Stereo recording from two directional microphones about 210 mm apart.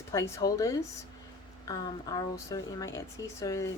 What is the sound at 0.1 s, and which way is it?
Speech, 15° left (ahead or behind).